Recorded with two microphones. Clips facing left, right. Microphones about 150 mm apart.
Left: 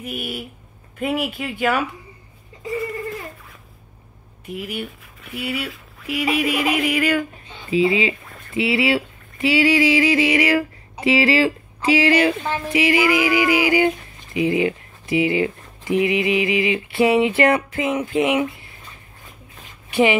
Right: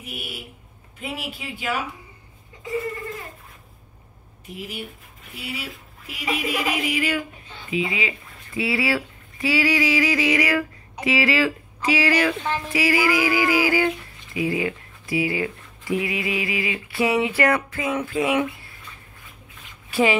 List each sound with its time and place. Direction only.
0.0 s speech: 50° left (ahead or behind)
4.6 s speech: 65° left (ahead or behind)
7.7 s speech: 30° left (ahead or behind)
19.9 s speech: 20° left (ahead or behind)